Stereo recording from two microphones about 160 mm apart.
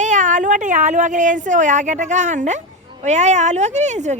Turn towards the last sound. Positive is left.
turn(degrees=-45)  # may be behind; listen again after turning